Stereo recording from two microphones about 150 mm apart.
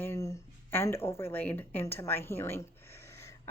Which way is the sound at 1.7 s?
15° left (ahead or behind).